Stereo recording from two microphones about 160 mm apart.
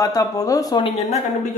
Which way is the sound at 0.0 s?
20° left (ahead or behind).